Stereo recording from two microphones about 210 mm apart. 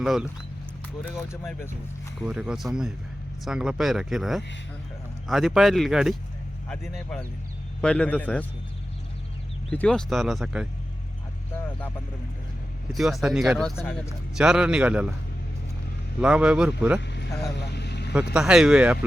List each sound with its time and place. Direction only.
0.0 s speech: centre (ahead or behind)
1.0 s speech: 10° left (ahead or behind)
2.2 s speech: 5° right (ahead or behind)
9.6 s speech: 5° left (ahead or behind)
12.9 s speech: centre (ahead or behind)
14.3 s speech: 5° right (ahead or behind)
16.2 s speech: 5° right (ahead or behind)
17.5 s vehicle: 55° left (ahead or behind)
18.1 s speech: 5° right (ahead or behind)